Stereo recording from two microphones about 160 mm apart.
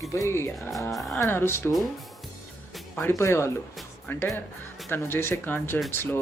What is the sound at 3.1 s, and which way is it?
Speech, 15° left (ahead or behind).